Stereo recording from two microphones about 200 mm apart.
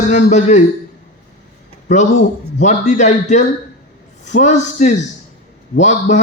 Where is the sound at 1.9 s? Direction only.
35° left (ahead or behind).